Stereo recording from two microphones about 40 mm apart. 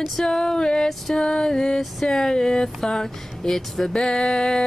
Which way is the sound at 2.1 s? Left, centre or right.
Centre.